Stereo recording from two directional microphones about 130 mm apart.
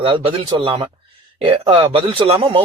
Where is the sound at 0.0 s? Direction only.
45° right (ahead or behind).